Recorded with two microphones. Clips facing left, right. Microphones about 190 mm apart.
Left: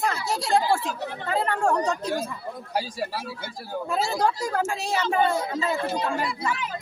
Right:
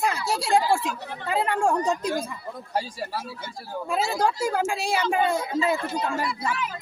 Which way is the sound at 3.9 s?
5° right (ahead or behind).